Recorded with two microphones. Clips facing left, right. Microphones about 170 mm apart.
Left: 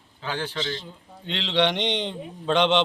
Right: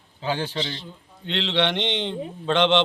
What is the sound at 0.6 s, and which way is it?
Speech, 45° left (ahead or behind).